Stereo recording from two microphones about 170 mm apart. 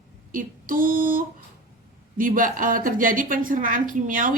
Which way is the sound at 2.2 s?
55° right (ahead or behind).